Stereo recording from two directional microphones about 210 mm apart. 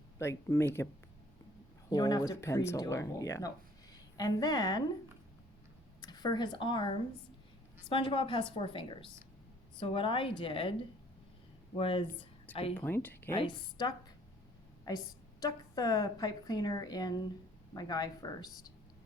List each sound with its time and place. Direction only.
0.2 s speech: 10° left (ahead or behind)
1.9 s a woman's voice: 20° left (ahead or behind)
6.0 s a woman's voice: 20° left (ahead or behind)
11.8 s a woman's voice: 25° left (ahead or behind)
12.7 s speech: 10° left (ahead or behind)
13.3 s a woman's voice: 25° left (ahead or behind)